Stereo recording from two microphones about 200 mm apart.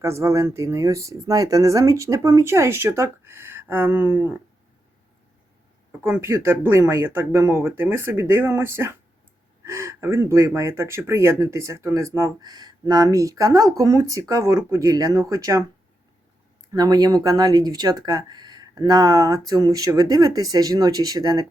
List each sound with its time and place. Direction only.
0.0 s speech: 15° right (ahead or behind)
5.9 s speech: 10° right (ahead or behind)
16.7 s speech: 20° right (ahead or behind)